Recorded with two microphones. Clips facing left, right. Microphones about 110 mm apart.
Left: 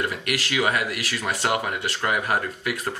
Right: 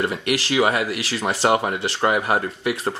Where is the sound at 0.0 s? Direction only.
25° right (ahead or behind).